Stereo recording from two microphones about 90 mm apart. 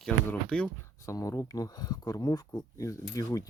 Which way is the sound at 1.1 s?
40° left (ahead or behind).